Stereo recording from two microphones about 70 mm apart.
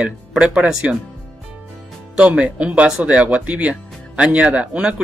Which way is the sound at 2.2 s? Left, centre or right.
Centre.